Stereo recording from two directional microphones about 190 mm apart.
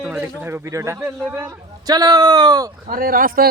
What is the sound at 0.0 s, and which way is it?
A man's voice, 10° right (ahead or behind).